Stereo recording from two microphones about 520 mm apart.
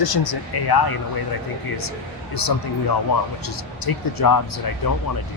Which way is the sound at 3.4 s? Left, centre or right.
Left.